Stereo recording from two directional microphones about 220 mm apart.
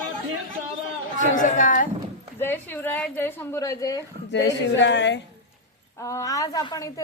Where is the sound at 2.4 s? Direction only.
10° left (ahead or behind).